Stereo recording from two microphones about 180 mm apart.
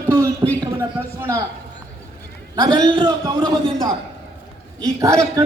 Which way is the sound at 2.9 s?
25° right (ahead or behind).